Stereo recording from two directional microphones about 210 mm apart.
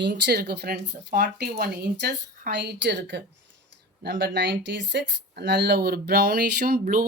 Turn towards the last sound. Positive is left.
turn(degrees=-45)  # may be behind; listen again after turning